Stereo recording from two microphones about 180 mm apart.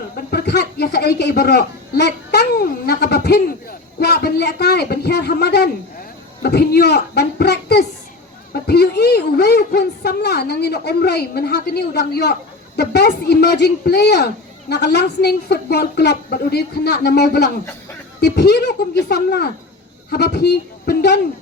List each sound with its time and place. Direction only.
0.3 s a woman's voice: 65° left (ahead or behind)